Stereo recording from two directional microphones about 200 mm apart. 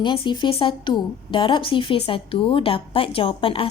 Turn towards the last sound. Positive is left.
turn(degrees=25)  # may be behind; listen again after turning